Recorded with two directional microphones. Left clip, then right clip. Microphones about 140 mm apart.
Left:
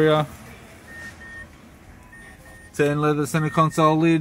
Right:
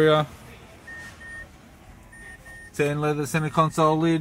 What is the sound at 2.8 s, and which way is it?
Speech, 5° left (ahead or behind).